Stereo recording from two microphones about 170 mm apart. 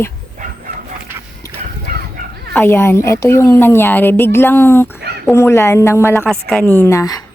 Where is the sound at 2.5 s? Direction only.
10° left (ahead or behind).